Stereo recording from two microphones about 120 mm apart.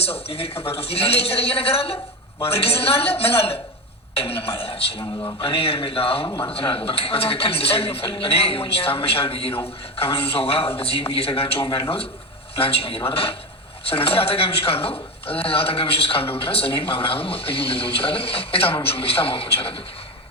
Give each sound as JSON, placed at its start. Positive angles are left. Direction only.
{"t": 0.0, "sound": "speech", "side_deg": 55}